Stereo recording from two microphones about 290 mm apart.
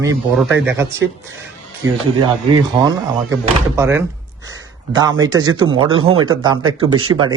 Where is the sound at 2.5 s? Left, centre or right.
Centre.